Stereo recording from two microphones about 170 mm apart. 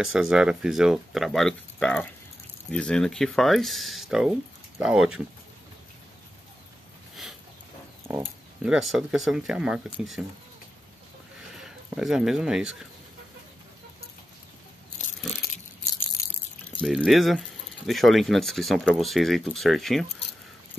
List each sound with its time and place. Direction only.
0.0 s speech: 5° right (ahead or behind)
8.2 s speech: centre (ahead or behind)
11.6 s speech: 5° right (ahead or behind)
16.8 s speech: centre (ahead or behind)